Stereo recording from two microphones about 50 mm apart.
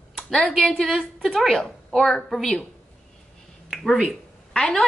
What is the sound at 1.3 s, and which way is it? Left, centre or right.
Speech, centre.